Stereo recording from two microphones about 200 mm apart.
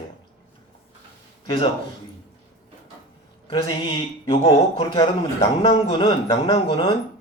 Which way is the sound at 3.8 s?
30° left (ahead or behind).